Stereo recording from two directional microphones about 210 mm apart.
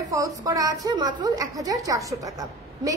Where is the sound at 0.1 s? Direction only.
15° right (ahead or behind).